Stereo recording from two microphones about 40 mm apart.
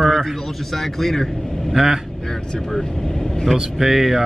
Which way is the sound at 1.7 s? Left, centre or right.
Centre.